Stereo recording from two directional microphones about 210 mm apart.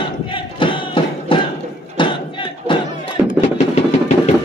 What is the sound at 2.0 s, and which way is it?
Crowd, 25° left (ahead or behind).